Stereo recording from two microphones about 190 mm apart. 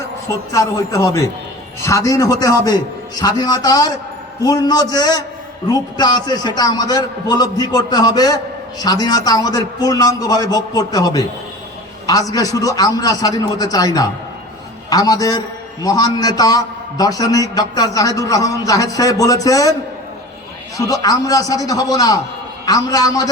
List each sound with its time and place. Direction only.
0.3 s a man's voice: 15° left (ahead or behind)
20.7 s a man's voice: 20° left (ahead or behind)